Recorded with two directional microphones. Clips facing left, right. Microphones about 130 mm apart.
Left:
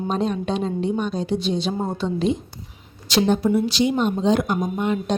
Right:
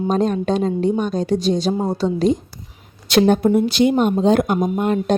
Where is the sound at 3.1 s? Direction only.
55° right (ahead or behind).